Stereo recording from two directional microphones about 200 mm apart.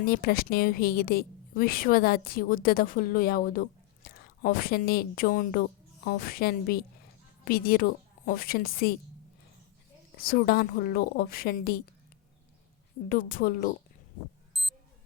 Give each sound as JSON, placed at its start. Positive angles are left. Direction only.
{"t": 0.0, "sound": "a woman's voice", "side_deg": 50}
{"t": 10.2, "sound": "a woman's voice", "side_deg": 50}
{"t": 13.1, "sound": "a woman's voice", "side_deg": 45}
{"t": 14.5, "sound": "a sound", "side_deg": 0}